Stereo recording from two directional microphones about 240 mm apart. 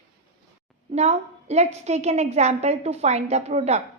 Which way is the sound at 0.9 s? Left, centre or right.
Right.